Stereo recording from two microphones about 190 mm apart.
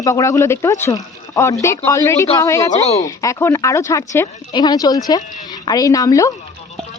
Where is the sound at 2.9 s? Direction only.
20° left (ahead or behind).